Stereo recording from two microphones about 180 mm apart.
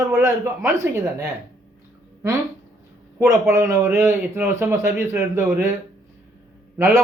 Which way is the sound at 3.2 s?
15° right (ahead or behind).